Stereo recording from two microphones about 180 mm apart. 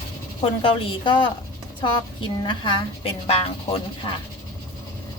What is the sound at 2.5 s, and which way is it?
Speech, 30° left (ahead or behind).